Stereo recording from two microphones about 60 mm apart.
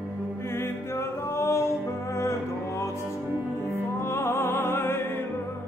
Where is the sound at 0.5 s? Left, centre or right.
Left.